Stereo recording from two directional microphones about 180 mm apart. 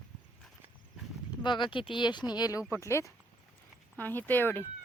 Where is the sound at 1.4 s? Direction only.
25° left (ahead or behind); by 4.6 s 10° left (ahead or behind).